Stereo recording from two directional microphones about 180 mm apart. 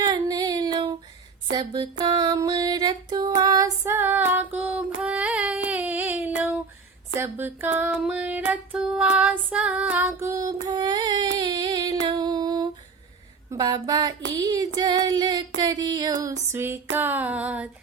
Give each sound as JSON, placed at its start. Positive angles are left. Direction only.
{"t": 0.0, "sound": "child singing", "side_deg": -20}
{"t": 1.5, "sound": "female singing", "side_deg": -25}
{"t": 4.9, "sound": "a sound", "side_deg": -5}
{"t": 7.2, "sound": "female singing", "side_deg": -10}
{"t": 11.3, "sound": "humming", "side_deg": -25}
{"t": 13.5, "sound": "female singing", "side_deg": -20}